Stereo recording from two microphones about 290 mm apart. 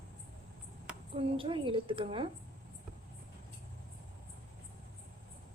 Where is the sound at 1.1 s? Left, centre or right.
Centre.